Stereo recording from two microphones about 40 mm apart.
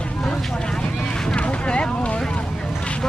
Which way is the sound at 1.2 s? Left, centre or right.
Left.